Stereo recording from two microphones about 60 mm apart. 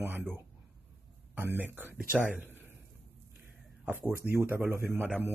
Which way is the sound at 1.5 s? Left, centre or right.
Right.